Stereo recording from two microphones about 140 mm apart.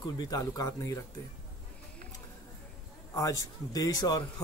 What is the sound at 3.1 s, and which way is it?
Speech, 25° left (ahead or behind).